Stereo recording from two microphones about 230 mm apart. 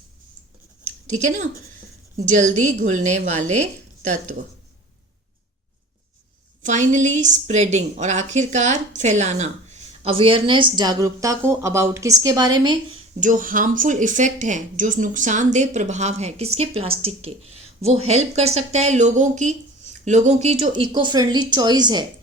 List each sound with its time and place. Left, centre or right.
1.0 s speech: right
6.6 s speech: right; by 12.7 s centre
13.1 s speech: right; by 22.0 s centre